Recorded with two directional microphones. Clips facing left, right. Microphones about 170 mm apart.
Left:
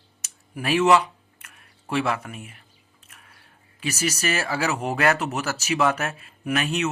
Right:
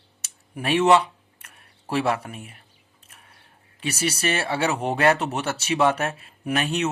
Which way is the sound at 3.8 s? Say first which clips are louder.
Right 1 dB; 30° right (ahead or behind).